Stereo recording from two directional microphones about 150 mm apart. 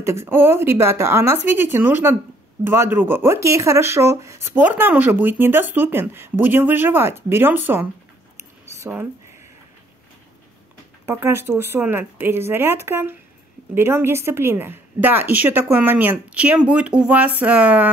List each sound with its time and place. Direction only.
0.0 s speech: 15° right (ahead or behind)
11.1 s speech: 15° right (ahead or behind)